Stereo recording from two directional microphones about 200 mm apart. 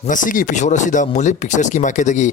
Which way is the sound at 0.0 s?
40° left (ahead or behind).